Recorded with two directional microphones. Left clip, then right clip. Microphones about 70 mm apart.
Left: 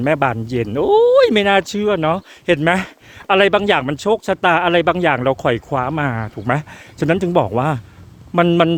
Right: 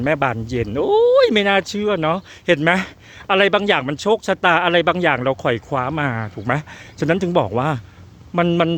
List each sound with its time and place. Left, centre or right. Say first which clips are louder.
0.0 s speech: left 2 dB; left
1.3 s speech: left 2 dB; left
1.9 s speech: left 2 dB; centre
3.2 s speech: left 2 dB; left
4.3 s speech: left 1 dB; centre
5.2 s speech: left 2 dB; left
5.6 s speech: left 2 dB; left
6.5 s speech: left 2 dB; left
8.4 s a man's voice: left 4 dB; left